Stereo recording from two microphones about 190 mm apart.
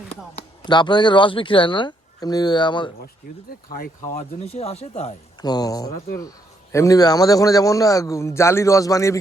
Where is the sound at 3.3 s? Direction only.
50° left (ahead or behind); by 5.1 s 35° left (ahead or behind).